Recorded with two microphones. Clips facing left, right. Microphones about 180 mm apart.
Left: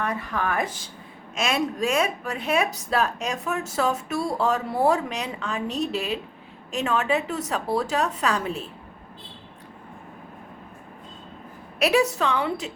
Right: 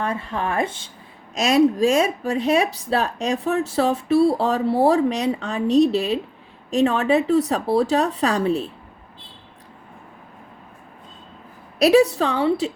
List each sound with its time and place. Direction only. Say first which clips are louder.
0.0 s speech: right 2 dB; 30° right (ahead or behind)
11.8 s speech: right 6 dB; 35° right (ahead or behind)